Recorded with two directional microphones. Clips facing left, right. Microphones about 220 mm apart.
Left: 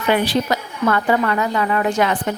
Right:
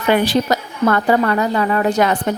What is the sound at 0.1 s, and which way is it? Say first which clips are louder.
A woman's voice: right 3 dB; 45° right (ahead or behind).